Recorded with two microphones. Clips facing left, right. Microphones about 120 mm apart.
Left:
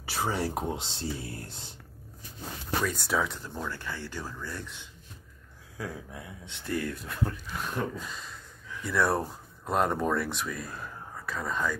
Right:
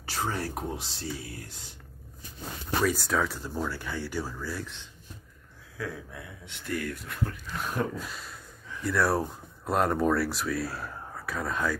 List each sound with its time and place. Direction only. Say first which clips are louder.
0.1 s speech: left 2 dB; 10° left (ahead or behind); by 1.7 s 30° left (ahead or behind)
2.8 s speech: right 3 dB; 5° right (ahead or behind)
3.4 s speech: right 3 dB; 10° right (ahead or behind)
5.8 s speech: right 1 dB; 20° left (ahead or behind)
7.5 s speech: right 2 dB; 5° right (ahead or behind)